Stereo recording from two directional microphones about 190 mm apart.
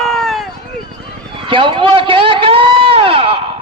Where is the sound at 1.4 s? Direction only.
25° right (ahead or behind).